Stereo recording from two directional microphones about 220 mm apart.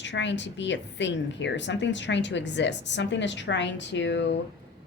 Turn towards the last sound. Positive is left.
turn(degrees=55)  # may be behind; listen again after turning